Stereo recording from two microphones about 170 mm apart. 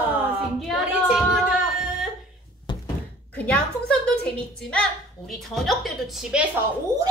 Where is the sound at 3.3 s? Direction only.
5° left (ahead or behind).